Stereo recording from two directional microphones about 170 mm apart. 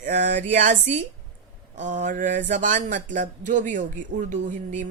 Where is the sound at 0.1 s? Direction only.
50° right (ahead or behind).